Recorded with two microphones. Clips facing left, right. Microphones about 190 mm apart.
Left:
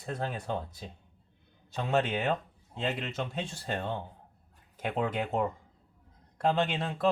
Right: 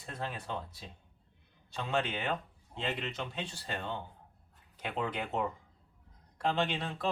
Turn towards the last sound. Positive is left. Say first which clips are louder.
# left 4 dB
turn(degrees=50)  # may be behind; listen again after turning